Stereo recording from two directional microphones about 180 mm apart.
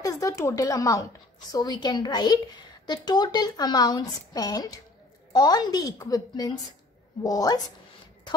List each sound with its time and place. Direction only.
0.0 s a woman's voice: 20° left (ahead or behind)